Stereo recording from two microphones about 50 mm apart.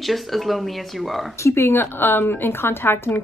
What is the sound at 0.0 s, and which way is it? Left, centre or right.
Speech, centre.